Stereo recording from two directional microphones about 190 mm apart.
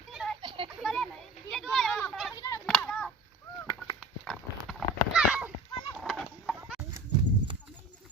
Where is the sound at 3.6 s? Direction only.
20° left (ahead or behind).